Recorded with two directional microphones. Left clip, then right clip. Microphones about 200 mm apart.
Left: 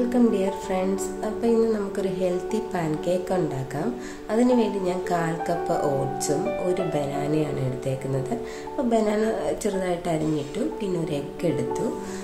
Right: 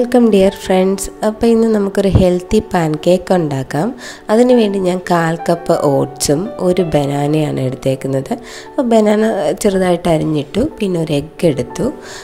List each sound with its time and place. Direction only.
0.1 s a woman's voice: 45° right (ahead or behind)